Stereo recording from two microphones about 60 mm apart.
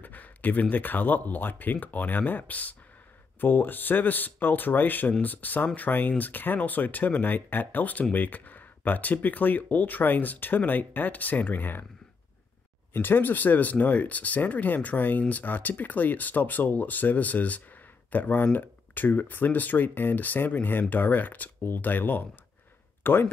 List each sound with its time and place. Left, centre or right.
0.0 s speech: left
12.9 s speech: left